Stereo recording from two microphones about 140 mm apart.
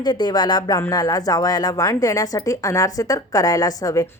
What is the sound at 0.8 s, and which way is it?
A woman's voice, 25° left (ahead or behind).